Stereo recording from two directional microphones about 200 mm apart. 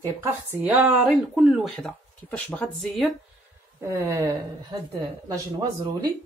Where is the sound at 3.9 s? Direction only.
15° right (ahead or behind).